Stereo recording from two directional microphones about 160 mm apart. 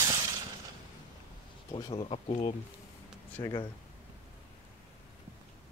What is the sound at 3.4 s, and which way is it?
Speech, 20° left (ahead or behind).